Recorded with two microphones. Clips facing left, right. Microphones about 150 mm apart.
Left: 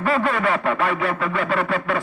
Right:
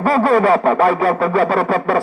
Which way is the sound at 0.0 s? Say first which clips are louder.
Right 7 dB; 40° right (ahead or behind).